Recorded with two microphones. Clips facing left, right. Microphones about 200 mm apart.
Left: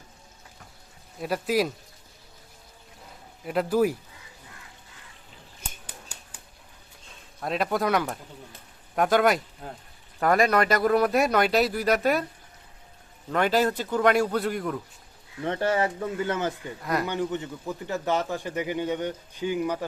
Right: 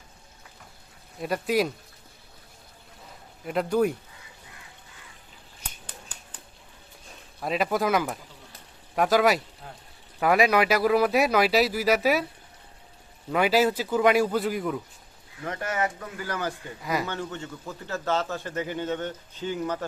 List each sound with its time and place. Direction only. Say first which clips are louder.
1.2 s speech: even; centre (ahead or behind)
3.4 s speech: left 1 dB; centre (ahead or behind)
5.8 s a sound: even; 10° left (ahead or behind)
7.4 s speech: right 1 dB; centre (ahead or behind)
13.3 s speech: right 1 dB; 5° right (ahead or behind)
15.4 s speech: left 4 dB; 30° left (ahead or behind)
16.8 s speech: left 1 dB; centre (ahead or behind)
17.1 s a man's voice: left 5 dB; 15° left (ahead or behind)